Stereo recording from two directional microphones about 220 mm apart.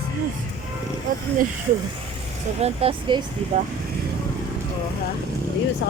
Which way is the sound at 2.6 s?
25° right (ahead or behind).